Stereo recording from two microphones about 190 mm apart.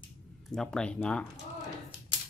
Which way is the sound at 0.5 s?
5° left (ahead or behind).